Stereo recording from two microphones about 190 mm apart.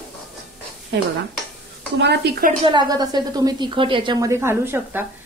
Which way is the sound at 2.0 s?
60° right (ahead or behind).